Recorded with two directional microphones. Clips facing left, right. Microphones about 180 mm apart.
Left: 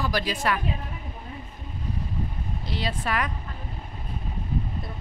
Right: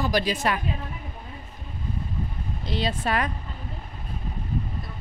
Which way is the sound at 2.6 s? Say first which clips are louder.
Right 3 dB; 25° right (ahead or behind).